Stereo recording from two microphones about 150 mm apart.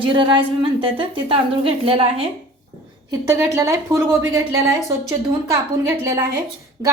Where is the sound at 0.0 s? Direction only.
35° right (ahead or behind).